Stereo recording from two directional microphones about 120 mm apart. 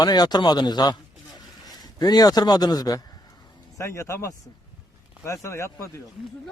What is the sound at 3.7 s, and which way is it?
Speech, 25° left (ahead or behind).